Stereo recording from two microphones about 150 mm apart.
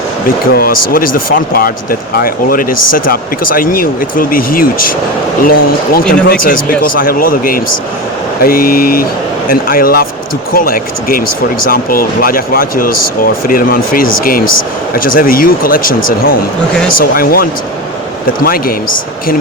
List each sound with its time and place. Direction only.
0.3 s speech: 75° left (ahead or behind)